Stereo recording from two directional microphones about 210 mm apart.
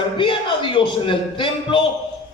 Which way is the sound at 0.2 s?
25° left (ahead or behind).